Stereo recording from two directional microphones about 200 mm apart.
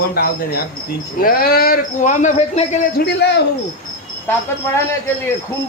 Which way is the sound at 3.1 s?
55° left (ahead or behind).